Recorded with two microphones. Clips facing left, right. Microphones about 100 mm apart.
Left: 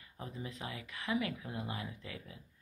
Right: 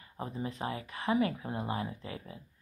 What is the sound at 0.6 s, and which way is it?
Speech, 35° right (ahead or behind).